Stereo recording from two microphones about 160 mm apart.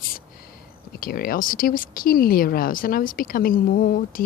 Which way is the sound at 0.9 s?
65° left (ahead or behind).